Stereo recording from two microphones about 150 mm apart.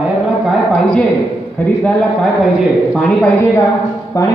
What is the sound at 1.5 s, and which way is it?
A man's voice, 10° left (ahead or behind).